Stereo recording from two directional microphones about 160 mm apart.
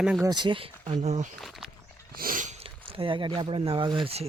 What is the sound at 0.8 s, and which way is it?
Speech, 45° right (ahead or behind).